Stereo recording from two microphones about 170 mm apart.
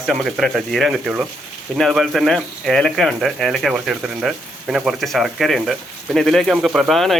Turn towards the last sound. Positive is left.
turn(degrees=0)  # may be behind; listen again after turning